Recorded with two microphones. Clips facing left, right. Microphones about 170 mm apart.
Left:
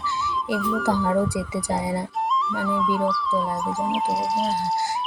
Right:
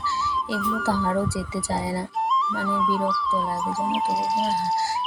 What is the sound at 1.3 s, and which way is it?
Speech, 20° left (ahead or behind).